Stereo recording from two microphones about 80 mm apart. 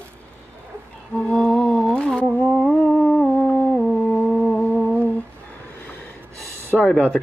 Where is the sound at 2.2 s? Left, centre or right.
Centre.